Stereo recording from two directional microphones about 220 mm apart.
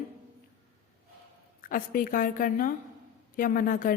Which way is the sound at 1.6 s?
40° left (ahead or behind).